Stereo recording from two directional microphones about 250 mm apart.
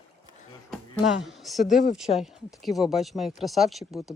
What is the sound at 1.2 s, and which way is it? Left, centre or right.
Speech, centre.